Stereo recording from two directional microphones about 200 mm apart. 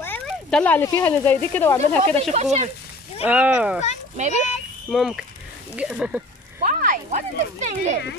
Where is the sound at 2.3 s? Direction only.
35° right (ahead or behind).